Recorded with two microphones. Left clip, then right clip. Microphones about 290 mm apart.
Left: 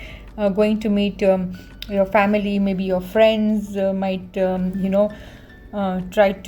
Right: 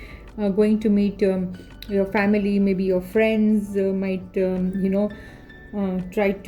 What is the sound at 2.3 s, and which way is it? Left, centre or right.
A woman's voice, left.